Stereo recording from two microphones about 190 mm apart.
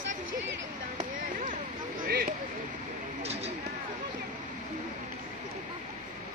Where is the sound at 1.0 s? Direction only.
40° right (ahead or behind).